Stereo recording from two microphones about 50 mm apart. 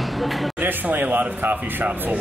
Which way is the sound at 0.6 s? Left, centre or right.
Right.